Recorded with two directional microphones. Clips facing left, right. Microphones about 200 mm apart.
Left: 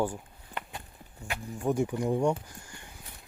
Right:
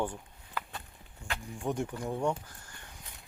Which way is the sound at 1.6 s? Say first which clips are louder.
Left 6 dB; 10° left (ahead or behind).